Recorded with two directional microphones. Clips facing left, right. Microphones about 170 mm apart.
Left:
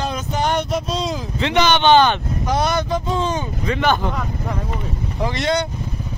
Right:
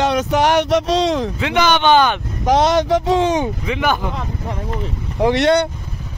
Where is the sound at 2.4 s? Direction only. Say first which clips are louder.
Right 7 dB; 90° right.